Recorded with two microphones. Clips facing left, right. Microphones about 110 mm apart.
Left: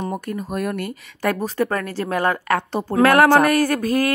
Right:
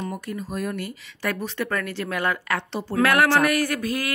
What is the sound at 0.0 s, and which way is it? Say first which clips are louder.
A woman's voice: left 4 dB; 50° left (ahead or behind).